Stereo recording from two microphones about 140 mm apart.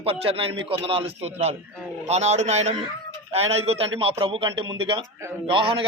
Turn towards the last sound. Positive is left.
turn(degrees=-40)  # may be behind; listen again after turning